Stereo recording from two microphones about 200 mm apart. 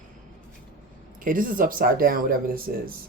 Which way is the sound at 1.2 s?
45° right (ahead or behind).